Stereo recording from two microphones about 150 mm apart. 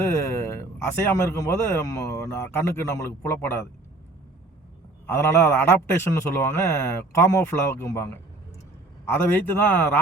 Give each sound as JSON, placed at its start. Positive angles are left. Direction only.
{"t": 0.0, "sound": "a man's voice", "side_deg": 15}
{"t": 5.0, "sound": "a man's voice", "side_deg": 15}
{"t": 9.3, "sound": "a man's voice", "side_deg": 10}